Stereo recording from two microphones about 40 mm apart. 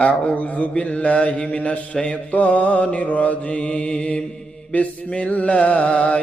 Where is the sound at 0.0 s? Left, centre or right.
Left.